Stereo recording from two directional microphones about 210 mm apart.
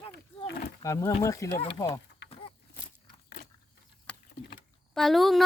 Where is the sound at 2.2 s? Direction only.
55° left (ahead or behind).